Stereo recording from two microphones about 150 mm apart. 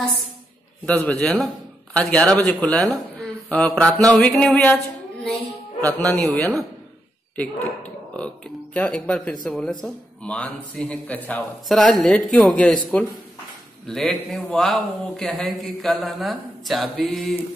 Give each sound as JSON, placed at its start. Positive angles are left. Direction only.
{"t": 0.8, "sound": "a woman's voice", "side_deg": 10}
{"t": 5.8, "sound": "speech", "side_deg": 10}
{"t": 7.3, "sound": "speech", "side_deg": 10}
{"t": 8.7, "sound": "a man's voice", "side_deg": 10}
{"t": 13.8, "sound": "a man's voice", "side_deg": 5}